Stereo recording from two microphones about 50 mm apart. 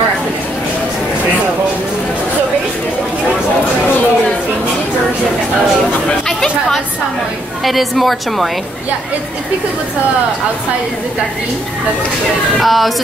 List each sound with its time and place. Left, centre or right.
6.0 s chatter: centre
7.6 s a woman's voice: centre
12.5 s a woman's voice: centre